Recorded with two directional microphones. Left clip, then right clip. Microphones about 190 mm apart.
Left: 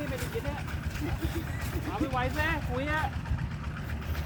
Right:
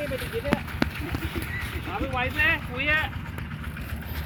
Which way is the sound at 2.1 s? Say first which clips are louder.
Right 8 dB; 25° left (ahead or behind).